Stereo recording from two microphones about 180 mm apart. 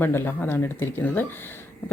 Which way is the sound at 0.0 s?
10° left (ahead or behind).